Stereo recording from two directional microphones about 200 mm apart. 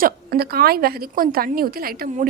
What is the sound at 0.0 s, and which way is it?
A woman's voice, 50° right (ahead or behind).